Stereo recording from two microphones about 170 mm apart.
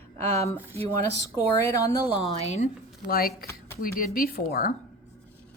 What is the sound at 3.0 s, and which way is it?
Speech, 60° left (ahead or behind).